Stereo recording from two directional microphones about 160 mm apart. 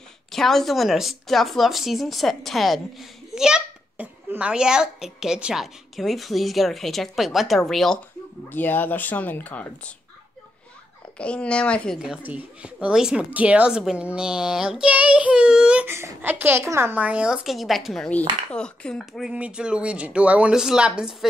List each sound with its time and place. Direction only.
0.3 s a woman's voice: centre (ahead or behind)
11.1 s speech: 5° left (ahead or behind)
12.3 s a woman's voice: 5° right (ahead or behind)